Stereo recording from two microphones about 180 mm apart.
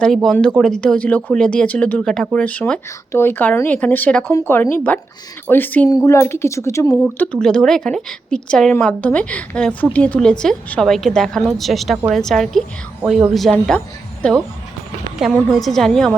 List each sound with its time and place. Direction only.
0.0 s a woman's voice: centre (ahead or behind)
7.0 s a woman's voice: 5° left (ahead or behind)